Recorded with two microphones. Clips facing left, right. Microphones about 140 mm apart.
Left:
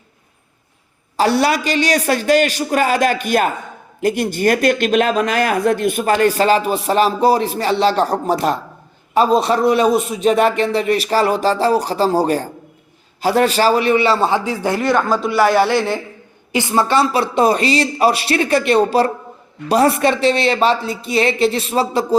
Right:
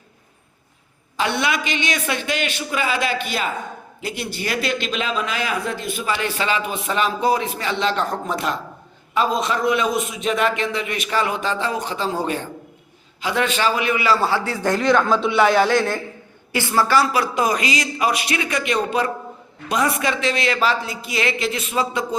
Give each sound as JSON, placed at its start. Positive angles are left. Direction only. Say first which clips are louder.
{"t": 1.1, "sound": "a man's voice", "louder": "left 7 dB", "side_deg": 35}